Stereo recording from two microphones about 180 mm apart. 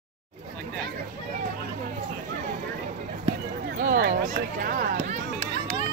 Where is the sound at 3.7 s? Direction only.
50° right (ahead or behind).